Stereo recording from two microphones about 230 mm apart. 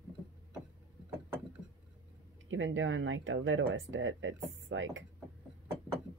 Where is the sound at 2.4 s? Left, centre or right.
Right.